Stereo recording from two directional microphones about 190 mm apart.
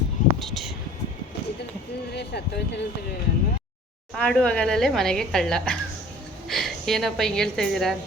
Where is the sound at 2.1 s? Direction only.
60° left (ahead or behind).